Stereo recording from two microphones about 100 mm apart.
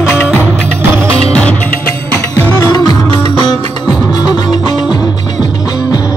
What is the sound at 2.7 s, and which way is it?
Music, 45° left (ahead or behind).